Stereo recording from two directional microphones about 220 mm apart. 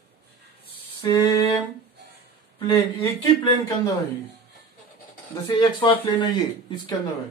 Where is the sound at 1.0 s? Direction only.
10° left (ahead or behind).